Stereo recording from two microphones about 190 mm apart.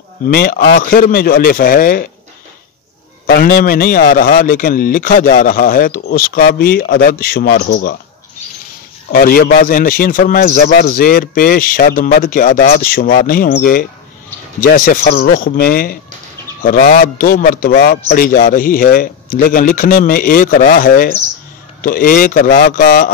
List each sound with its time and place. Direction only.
0.3 s a man's voice: 50° left (ahead or behind)
3.3 s a man's voice: 50° left (ahead or behind)
9.1 s a man's voice: 50° left (ahead or behind)